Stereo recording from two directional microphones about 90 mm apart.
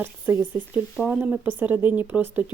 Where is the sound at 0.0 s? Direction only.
25° right (ahead or behind).